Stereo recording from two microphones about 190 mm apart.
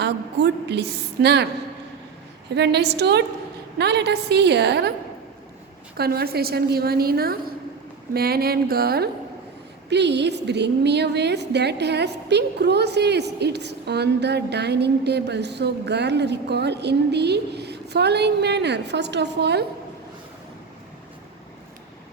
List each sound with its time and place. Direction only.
0.0 s a woman's voice: 60° right (ahead or behind)
2.6 s a woman's voice: 60° right (ahead or behind)
6.0 s a woman's voice: 55° right (ahead or behind)
9.9 s a woman's voice: 65° right (ahead or behind)